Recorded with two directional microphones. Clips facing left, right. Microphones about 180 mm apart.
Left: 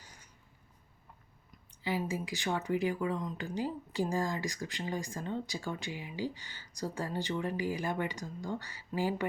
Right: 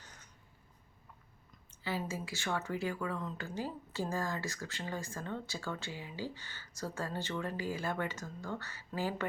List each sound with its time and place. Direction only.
0.0 s writing: 10° left (ahead or behind)
1.5 s speech: 15° left (ahead or behind)